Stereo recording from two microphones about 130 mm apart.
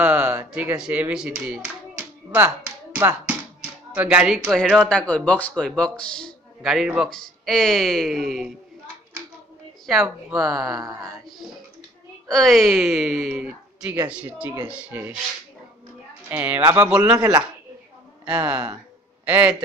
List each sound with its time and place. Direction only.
0.0 s speech: 10° right (ahead or behind)
4.6 s a man's voice: 5° left (ahead or behind)
9.8 s a man's voice: centre (ahead or behind)
10.8 s speech: 30° right (ahead or behind)
12.3 s a man's voice: centre (ahead or behind); by 15.1 s 15° right (ahead or behind)
16.3 s a man's voice: 15° right (ahead or behind)